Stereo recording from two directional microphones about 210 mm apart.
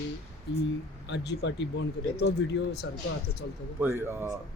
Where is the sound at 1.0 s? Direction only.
55° left (ahead or behind).